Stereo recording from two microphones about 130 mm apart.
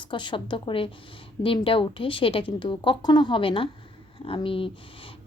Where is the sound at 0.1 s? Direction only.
35° left (ahead or behind).